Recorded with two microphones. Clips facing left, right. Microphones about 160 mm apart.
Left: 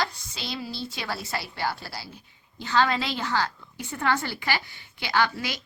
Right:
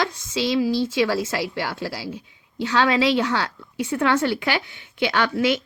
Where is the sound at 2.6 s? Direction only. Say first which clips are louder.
Right 5 dB; 90° right.